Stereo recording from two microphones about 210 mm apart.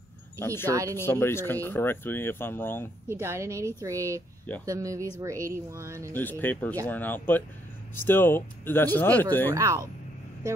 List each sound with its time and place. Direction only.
0.7 s a woman's voice: 15° right (ahead or behind)
0.9 s speech: 10° left (ahead or behind)
3.1 s a woman's voice: 10° right (ahead or behind)
6.1 s speech: 10° left (ahead or behind)
9.5 s a woman's voice: 15° right (ahead or behind)